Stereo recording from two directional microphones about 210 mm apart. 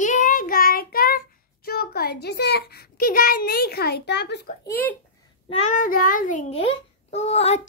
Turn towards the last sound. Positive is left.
turn(degrees=30)  # may be behind; listen again after turning